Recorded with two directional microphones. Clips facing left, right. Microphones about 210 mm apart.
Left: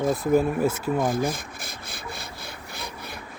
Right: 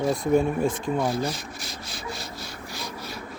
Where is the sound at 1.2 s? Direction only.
55° left (ahead or behind).